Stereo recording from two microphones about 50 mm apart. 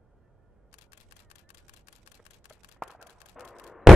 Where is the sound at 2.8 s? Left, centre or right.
Centre.